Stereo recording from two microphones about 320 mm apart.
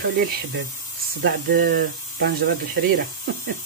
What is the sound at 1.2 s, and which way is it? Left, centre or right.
Speech, right.